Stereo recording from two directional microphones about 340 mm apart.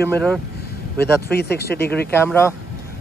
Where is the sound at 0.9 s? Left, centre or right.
Left.